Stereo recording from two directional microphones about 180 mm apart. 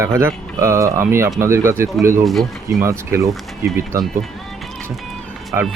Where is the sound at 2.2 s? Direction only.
Centre (ahead or behind).